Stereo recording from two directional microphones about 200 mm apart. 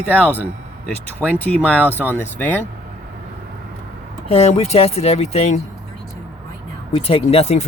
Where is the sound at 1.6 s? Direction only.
10° left (ahead or behind).